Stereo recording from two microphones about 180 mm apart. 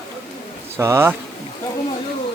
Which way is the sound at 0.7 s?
15° right (ahead or behind).